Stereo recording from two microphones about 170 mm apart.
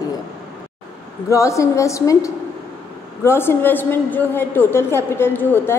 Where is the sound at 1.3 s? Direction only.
15° left (ahead or behind).